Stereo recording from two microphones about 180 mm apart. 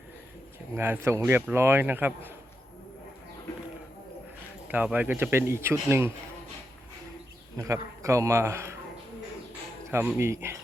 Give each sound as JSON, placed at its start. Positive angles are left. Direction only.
{"t": 0.8, "sound": "speech", "side_deg": -15}
{"t": 4.7, "sound": "speech", "side_deg": -10}
{"t": 7.5, "sound": "speech", "side_deg": -20}
{"t": 9.9, "sound": "speech", "side_deg": -10}